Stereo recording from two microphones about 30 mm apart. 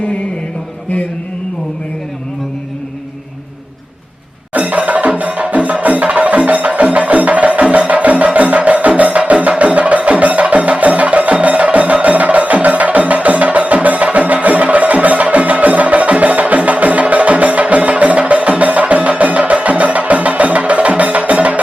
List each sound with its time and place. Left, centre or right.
4.5 s music: right
4.9 s music: right